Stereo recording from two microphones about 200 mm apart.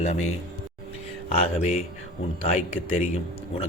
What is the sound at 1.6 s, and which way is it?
Speech, 30° left (ahead or behind).